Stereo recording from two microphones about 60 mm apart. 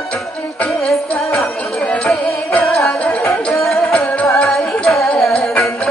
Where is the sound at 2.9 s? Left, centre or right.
Left.